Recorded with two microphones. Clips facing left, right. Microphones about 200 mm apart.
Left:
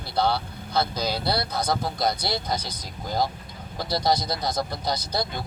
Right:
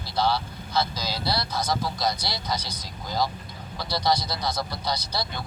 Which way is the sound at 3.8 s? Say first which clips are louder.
Left 1 dB; 50° left (ahead or behind).